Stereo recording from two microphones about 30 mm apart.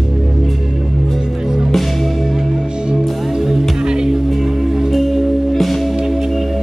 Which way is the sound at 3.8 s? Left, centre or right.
Right.